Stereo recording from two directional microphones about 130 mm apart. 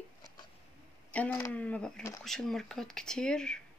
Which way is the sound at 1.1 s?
10° left (ahead or behind).